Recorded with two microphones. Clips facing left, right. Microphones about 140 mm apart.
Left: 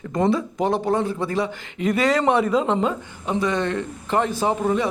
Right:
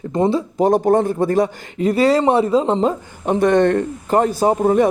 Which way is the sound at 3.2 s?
55° right (ahead or behind).